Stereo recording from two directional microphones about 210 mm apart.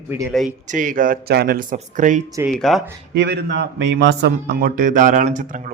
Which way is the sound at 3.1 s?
55° right (ahead or behind).